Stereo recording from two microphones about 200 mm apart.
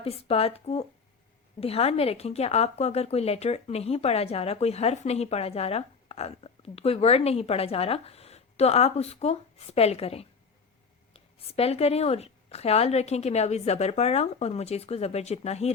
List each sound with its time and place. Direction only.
0.0 s a woman's voice: 30° left (ahead or behind)